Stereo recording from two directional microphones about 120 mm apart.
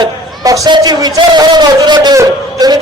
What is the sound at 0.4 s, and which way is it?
A man's voice, 30° right (ahead or behind).